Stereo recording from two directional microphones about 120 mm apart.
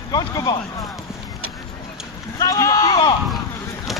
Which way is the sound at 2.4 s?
30° left (ahead or behind).